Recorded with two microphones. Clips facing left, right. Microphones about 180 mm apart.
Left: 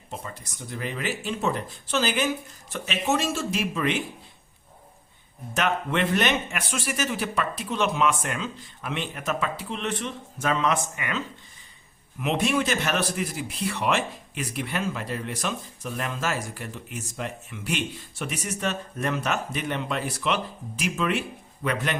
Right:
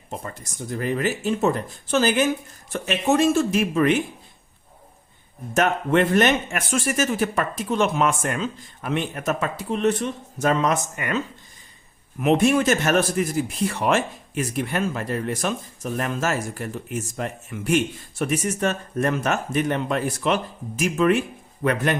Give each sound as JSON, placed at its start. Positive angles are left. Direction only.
{"t": 0.3, "sound": "speech", "side_deg": -45}
{"t": 5.5, "sound": "speech", "side_deg": -45}
{"t": 12.2, "sound": "speech", "side_deg": -45}